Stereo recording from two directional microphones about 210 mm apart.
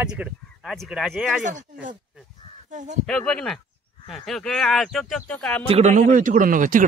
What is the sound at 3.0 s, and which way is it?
Speech, 5° left (ahead or behind).